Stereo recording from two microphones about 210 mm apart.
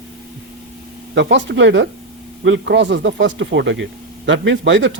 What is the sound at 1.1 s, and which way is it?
Speech, 60° right (ahead or behind).